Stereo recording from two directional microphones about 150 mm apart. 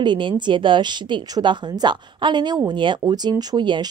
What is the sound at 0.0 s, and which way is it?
A woman's voice, 30° right (ahead or behind).